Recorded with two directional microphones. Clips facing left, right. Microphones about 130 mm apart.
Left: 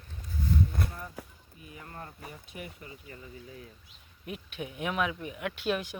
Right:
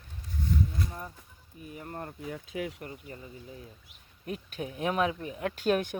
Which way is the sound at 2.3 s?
90° right.